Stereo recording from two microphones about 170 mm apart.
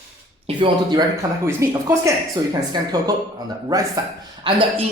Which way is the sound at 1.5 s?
15° right (ahead or behind).